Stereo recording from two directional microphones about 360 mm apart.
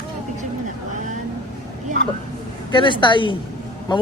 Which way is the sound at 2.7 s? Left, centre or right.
Centre.